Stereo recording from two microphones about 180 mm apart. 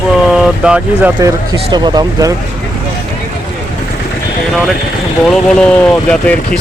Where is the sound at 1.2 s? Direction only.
20° right (ahead or behind).